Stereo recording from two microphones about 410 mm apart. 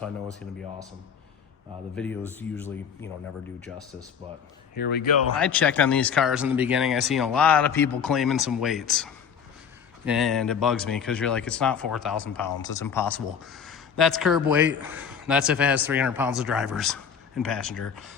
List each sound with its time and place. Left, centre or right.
2.0 s speech: centre
4.7 s speech: left
5.4 s speech: centre